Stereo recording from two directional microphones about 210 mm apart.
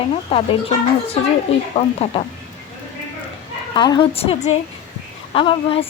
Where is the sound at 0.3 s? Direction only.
25° left (ahead or behind).